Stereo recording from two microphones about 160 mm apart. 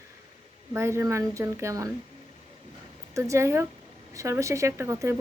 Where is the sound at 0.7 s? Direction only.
15° right (ahead or behind).